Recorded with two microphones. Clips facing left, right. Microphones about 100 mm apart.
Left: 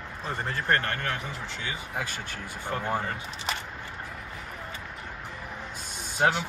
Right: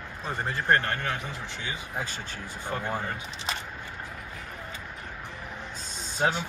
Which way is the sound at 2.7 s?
15° left (ahead or behind).